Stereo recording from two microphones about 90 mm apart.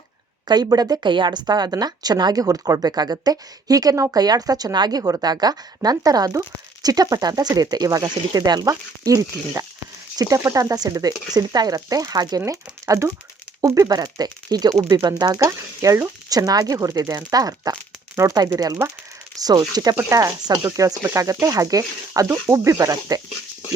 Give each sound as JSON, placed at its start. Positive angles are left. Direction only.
{"t": 0.4, "sound": "speech", "side_deg": -50}
{"t": 15.4, "sound": "speech", "side_deg": -35}
{"t": 20.0, "sound": "speech", "side_deg": -35}